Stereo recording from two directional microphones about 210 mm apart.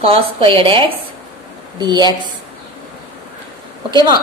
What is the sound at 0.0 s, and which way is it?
A woman's voice, 25° right (ahead or behind).